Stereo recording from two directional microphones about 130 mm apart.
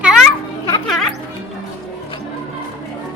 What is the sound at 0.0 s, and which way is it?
Children playing, 5° right (ahead or behind).